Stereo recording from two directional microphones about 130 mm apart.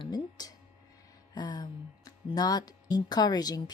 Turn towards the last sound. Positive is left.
turn(degrees=30)  # may be behind; listen again after turning